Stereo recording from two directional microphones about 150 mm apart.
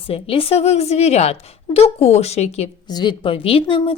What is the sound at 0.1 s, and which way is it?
A woman's voice, 40° left (ahead or behind).